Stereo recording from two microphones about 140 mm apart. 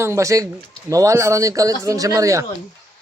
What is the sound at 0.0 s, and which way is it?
Speech, 20° right (ahead or behind).